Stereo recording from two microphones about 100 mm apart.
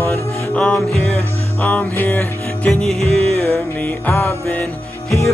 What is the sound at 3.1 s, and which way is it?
Music, centre (ahead or behind).